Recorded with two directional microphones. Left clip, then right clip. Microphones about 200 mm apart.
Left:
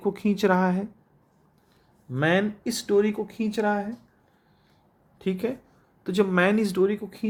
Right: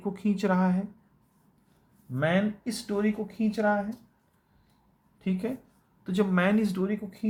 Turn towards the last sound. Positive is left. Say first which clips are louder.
# left 8 dB
turn(degrees=50)  # may be behind; listen again after turning